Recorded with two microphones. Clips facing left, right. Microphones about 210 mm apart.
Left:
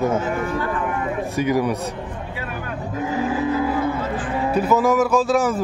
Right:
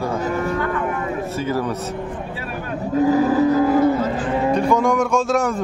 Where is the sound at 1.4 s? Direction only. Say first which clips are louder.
Left 4 dB; 15° left (ahead or behind).